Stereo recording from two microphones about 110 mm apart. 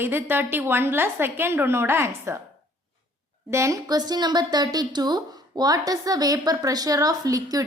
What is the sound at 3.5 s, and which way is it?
Speech, 25° right (ahead or behind).